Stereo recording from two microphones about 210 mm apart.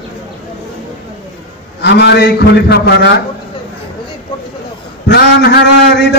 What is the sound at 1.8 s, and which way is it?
A man's voice, 55° left (ahead or behind).